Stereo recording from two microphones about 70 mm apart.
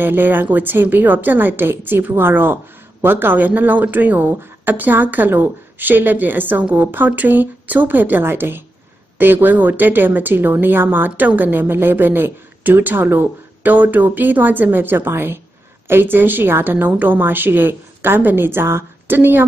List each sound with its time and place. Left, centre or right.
0.0 s a woman's voice: right